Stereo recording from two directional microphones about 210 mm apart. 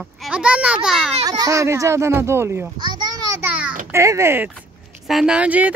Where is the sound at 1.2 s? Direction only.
15° right (ahead or behind).